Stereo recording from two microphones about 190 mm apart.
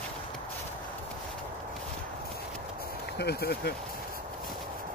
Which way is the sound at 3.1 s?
55° left (ahead or behind).